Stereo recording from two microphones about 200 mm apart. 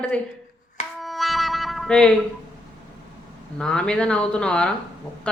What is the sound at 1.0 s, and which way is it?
Music, centre (ahead or behind).